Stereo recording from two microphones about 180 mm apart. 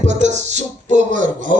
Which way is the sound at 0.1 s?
40° right (ahead or behind).